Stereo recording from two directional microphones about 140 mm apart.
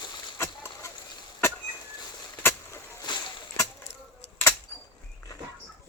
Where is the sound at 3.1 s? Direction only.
30° left (ahead or behind).